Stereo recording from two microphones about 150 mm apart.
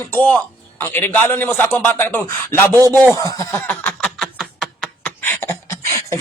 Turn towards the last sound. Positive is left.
turn(degrees=20)  # may be behind; listen again after turning